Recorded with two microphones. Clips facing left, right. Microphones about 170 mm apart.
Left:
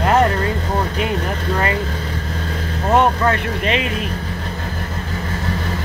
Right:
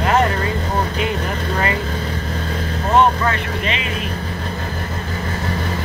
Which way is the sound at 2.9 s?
50° left (ahead or behind).